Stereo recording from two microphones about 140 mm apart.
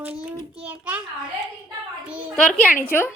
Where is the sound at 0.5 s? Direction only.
10° right (ahead or behind).